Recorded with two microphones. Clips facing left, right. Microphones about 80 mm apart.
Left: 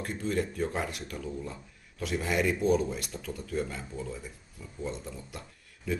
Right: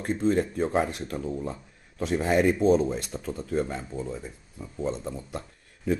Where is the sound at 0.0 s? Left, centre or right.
Right.